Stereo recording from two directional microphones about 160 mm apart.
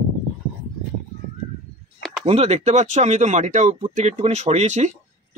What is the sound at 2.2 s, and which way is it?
Speech, 40° right (ahead or behind).